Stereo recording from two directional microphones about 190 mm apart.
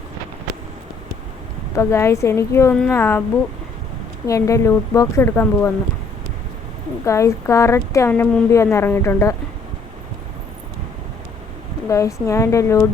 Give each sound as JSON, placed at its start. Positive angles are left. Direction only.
{"t": 1.7, "sound": "speech", "side_deg": 15}
{"t": 4.3, "sound": "speech", "side_deg": 15}
{"t": 7.0, "sound": "speech", "side_deg": 15}
{"t": 11.9, "sound": "speech", "side_deg": 15}